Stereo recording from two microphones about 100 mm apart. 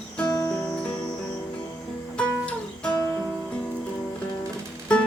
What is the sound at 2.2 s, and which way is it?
Music, 10° left (ahead or behind).